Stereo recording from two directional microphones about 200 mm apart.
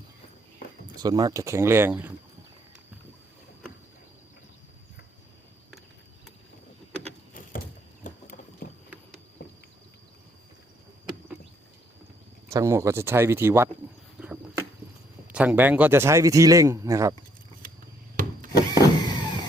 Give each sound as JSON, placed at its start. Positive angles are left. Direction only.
{"t": 0.9, "sound": "speech", "side_deg": -20}
{"t": 8.0, "sound": "mechanisms", "side_deg": 45}
{"t": 9.4, "sound": "a sound", "side_deg": 55}
{"t": 12.5, "sound": "speech", "side_deg": -15}
{"t": 14.2, "sound": "a sound", "side_deg": -5}
{"t": 15.3, "sound": "speech", "side_deg": -5}
{"t": 18.5, "sound": "power windows", "side_deg": 20}